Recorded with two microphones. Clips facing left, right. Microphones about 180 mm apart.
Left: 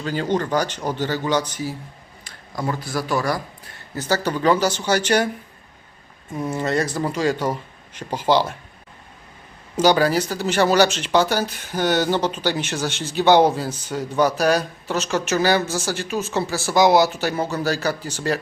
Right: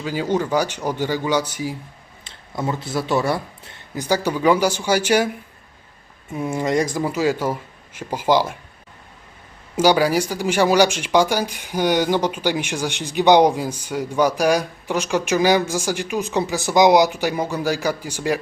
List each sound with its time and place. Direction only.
0.0 s speech: 10° right (ahead or behind)
2.2 s speech: 25° right (ahead or behind)
3.9 s speech: 15° right (ahead or behind)
9.7 s speech: 10° right (ahead or behind)